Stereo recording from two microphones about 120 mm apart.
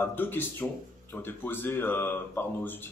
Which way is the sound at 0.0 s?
15° left (ahead or behind).